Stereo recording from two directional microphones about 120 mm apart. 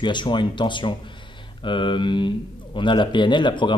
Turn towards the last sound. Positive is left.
turn(degrees=40)  # may be behind; listen again after turning